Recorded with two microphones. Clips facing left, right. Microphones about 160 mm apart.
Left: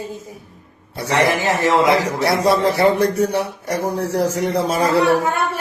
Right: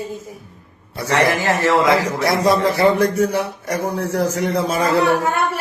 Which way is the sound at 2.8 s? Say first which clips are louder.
Even; 35° left (ahead or behind).